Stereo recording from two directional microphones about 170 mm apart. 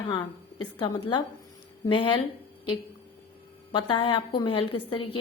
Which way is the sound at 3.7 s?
25° left (ahead or behind).